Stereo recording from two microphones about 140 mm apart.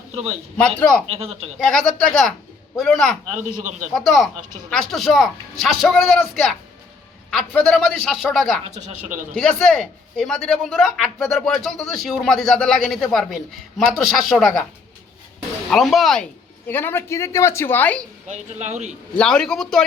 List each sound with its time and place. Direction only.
0.1 s a man's voice: 50° right (ahead or behind)
1.5 s a man's voice: 5° left (ahead or behind)
3.3 s speech: 65° right (ahead or behind)
3.9 s a man's voice: centre (ahead or behind)
7.6 s a man's voice: centre (ahead or behind)
8.6 s speech: 55° right (ahead or behind)
9.3 s a man's voice: 5° left (ahead or behind)
15.7 s speech: centre (ahead or behind)
18.3 s speech: 55° right (ahead or behind)
19.1 s a man's voice: 5° left (ahead or behind)